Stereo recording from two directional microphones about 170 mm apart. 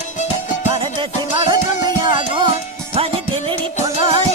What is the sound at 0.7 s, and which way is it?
Music, 30° right (ahead or behind).